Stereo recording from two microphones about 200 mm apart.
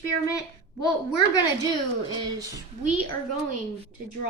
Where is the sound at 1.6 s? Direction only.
20° right (ahead or behind).